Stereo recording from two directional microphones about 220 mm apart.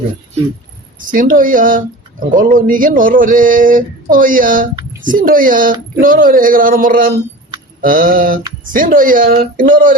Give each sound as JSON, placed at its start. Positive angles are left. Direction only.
{"t": 0.9, "sound": "speech", "side_deg": -40}